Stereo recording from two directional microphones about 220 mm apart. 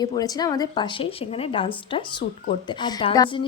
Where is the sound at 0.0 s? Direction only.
15° left (ahead or behind).